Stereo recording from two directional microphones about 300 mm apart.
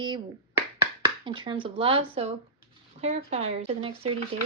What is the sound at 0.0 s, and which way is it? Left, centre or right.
Speech, centre.